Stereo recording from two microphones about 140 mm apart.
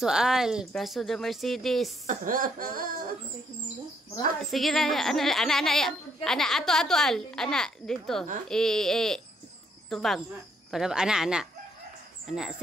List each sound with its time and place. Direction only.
0.0 s speech: 5° right (ahead or behind)
2.0 s speech: 80° right
4.4 s speech: centre (ahead or behind)